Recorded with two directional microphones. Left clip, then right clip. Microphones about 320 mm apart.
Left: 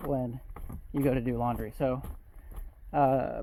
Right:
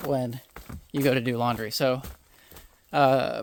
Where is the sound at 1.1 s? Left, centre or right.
Right.